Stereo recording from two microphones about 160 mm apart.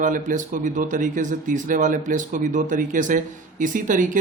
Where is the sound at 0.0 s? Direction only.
55° right (ahead or behind).